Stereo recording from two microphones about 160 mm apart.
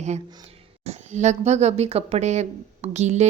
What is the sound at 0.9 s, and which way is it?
Speech, 45° right (ahead or behind).